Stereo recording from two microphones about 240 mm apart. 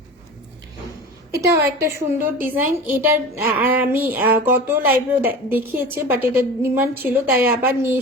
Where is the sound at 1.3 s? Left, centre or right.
Centre.